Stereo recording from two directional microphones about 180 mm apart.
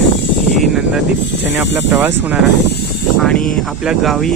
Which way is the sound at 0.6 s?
Centre (ahead or behind).